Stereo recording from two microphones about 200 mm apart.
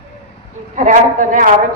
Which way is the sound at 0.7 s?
40° right (ahead or behind).